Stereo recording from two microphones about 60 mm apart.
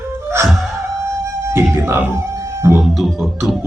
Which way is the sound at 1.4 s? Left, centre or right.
Right.